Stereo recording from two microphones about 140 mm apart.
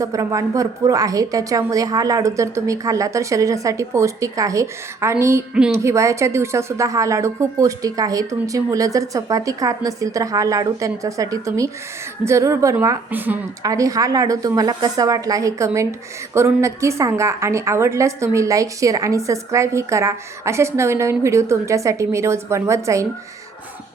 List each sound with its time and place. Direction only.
0.0 s a woman's voice: 25° right (ahead or behind)
13.6 s a woman's voice: 25° right (ahead or behind)